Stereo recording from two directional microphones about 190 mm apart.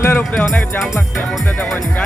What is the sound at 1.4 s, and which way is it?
Speech, 10° left (ahead or behind).